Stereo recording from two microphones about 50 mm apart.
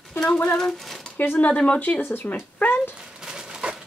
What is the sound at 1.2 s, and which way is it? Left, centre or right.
Speech, left.